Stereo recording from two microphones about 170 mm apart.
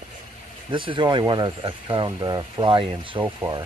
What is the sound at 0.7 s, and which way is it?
Speech, 30° right (ahead or behind).